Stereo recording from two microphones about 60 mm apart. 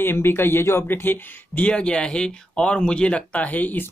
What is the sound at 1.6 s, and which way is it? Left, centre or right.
Speech, centre.